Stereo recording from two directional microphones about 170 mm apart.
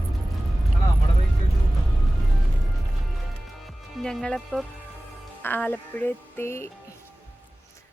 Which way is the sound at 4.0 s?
5° left (ahead or behind).